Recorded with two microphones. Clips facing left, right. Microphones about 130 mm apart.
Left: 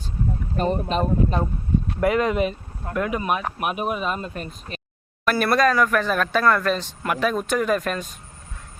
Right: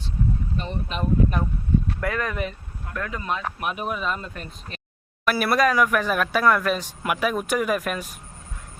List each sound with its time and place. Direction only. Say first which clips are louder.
0.5 s speech: left 8 dB; 45° left (ahead or behind)
2.0 s speech: left 7 dB; 20° left (ahead or behind)
5.2 s speech: left 2 dB; 5° right (ahead or behind)